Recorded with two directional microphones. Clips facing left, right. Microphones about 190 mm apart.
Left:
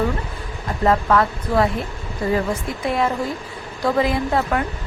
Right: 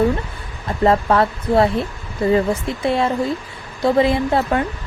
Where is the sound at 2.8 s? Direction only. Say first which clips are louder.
Right 3 dB; 25° right (ahead or behind).